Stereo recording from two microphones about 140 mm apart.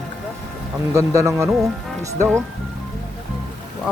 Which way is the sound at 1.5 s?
5° right (ahead or behind).